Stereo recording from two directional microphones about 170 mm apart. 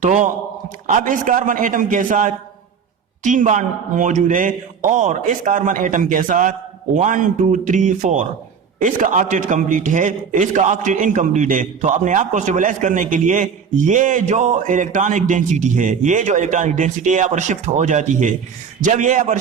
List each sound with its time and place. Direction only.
0.0 s a man's voice: 50° right (ahead or behind)